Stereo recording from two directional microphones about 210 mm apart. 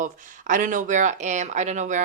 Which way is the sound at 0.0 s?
40° right (ahead or behind).